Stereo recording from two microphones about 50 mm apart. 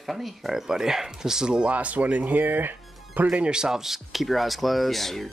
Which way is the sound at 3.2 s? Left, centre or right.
Right.